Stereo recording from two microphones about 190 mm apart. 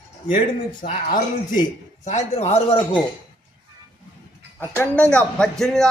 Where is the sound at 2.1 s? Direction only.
35° left (ahead or behind).